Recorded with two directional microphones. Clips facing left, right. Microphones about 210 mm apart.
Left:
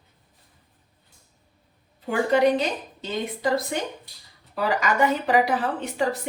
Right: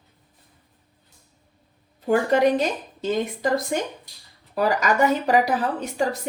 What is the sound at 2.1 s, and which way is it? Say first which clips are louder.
A woman's voice: right 1 dB; 45° right (ahead or behind).